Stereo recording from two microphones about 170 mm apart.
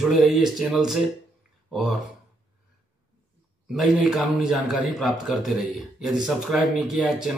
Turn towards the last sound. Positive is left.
turn(degrees=0)  # may be behind; listen again after turning